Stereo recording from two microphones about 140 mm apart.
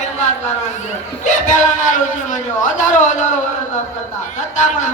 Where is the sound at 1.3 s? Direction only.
65° left (ahead or behind).